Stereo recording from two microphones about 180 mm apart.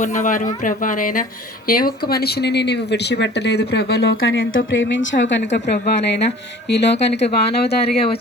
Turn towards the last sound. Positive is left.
turn(degrees=65)  # may be behind; listen again after turning